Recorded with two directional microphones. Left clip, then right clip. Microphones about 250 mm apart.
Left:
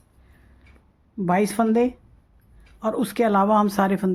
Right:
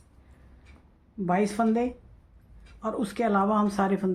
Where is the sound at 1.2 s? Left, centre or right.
Left.